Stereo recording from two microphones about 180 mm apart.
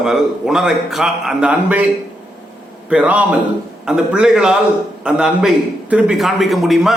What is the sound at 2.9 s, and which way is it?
A man's voice, 10° right (ahead or behind).